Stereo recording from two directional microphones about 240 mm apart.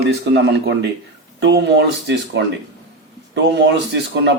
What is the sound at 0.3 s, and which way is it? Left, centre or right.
Speech, right.